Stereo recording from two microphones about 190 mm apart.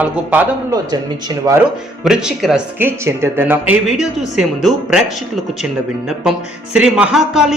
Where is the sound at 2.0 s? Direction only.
5° right (ahead or behind).